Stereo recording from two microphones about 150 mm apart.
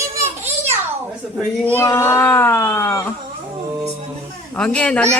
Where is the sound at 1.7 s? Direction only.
20° left (ahead or behind).